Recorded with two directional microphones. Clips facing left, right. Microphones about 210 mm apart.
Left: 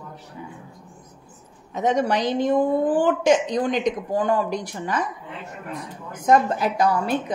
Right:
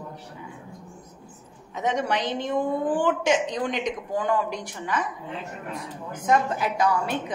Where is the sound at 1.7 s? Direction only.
35° left (ahead or behind).